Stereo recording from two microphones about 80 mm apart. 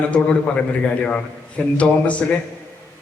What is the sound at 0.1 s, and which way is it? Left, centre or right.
A man's voice, centre.